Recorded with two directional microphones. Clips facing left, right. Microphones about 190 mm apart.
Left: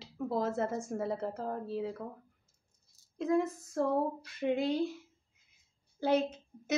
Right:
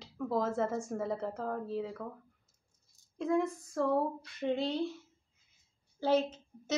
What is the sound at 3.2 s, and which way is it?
A woman's voice, 5° left (ahead or behind).